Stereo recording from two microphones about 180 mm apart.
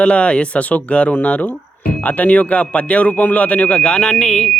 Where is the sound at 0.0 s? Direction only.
5° left (ahead or behind).